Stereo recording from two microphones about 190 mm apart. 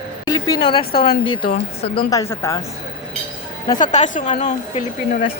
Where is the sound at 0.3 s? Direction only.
20° left (ahead or behind).